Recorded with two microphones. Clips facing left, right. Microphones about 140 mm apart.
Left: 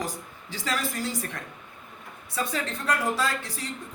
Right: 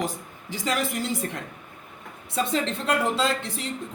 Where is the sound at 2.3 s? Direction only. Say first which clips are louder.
Right 5 dB; 25° right (ahead or behind).